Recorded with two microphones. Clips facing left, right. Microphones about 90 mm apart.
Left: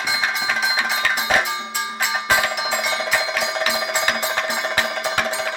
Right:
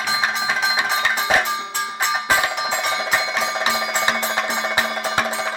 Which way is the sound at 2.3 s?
5° left (ahead or behind).